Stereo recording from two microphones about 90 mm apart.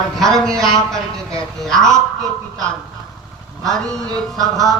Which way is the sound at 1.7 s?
5° left (ahead or behind).